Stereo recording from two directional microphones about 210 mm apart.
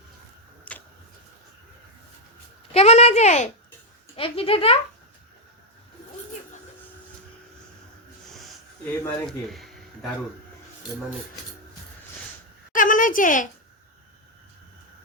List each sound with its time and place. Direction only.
0.7 s tick-tock: 5° left (ahead or behind)
2.7 s a child's voice: 30° left (ahead or behind)
9.0 s speech: centre (ahead or behind)
12.7 s a sound: 40° left (ahead or behind)